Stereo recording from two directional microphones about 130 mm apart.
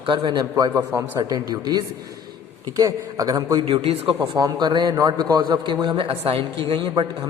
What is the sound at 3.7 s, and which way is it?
Speech, 45° right (ahead or behind).